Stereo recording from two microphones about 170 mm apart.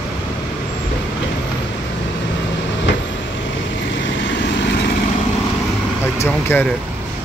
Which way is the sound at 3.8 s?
90° left.